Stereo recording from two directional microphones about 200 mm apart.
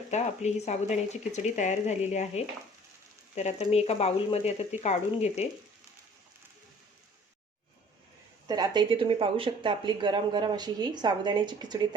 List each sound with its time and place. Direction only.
0.1 s speech: 35° left (ahead or behind)
8.4 s speech: 20° right (ahead or behind)